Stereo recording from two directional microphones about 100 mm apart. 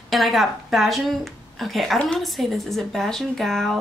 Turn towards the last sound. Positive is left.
turn(degrees=0)  # may be behind; listen again after turning